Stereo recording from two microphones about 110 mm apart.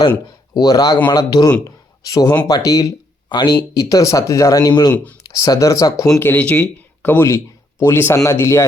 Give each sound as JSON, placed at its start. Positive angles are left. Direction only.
{"t": 0.5, "sound": "speech", "side_deg": 35}
{"t": 3.2, "sound": "speech", "side_deg": 40}
{"t": 6.1, "sound": "speech", "side_deg": 20}